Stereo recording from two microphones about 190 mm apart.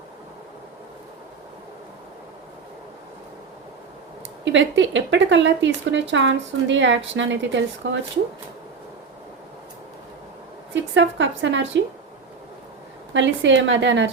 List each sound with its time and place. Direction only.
4.4 s speech: 75° right (ahead or behind)
10.9 s speech: 70° right (ahead or behind)
13.1 s speech: 75° right (ahead or behind)